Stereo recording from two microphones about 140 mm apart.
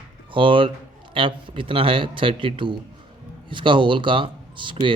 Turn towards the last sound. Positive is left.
turn(degrees=-35)  # may be behind; listen again after turning